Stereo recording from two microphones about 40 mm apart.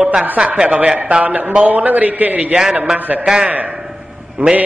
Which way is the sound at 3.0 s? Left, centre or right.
Right.